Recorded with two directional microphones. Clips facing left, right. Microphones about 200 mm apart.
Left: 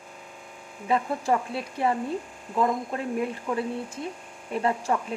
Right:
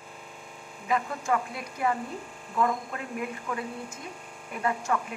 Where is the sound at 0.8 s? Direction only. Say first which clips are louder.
Left 3 dB; 30° left (ahead or behind).